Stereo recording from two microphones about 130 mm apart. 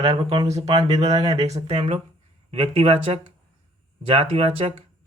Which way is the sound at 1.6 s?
50° right (ahead or behind).